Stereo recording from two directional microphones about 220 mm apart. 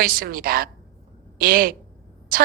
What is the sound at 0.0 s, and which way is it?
A woman's voice, 40° right (ahead or behind).